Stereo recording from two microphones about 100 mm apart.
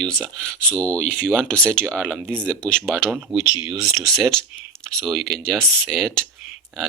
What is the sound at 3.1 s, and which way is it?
Speech, 5° right (ahead or behind).